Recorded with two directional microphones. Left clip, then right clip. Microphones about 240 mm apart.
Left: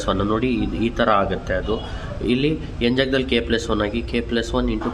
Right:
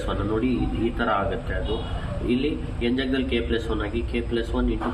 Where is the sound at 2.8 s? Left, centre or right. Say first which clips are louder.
Left 6 dB; left.